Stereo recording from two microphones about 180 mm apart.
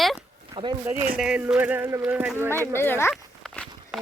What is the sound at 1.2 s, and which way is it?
Speech, 5° right (ahead or behind).